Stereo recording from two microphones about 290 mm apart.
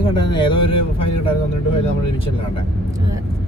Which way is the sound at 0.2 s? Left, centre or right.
Centre.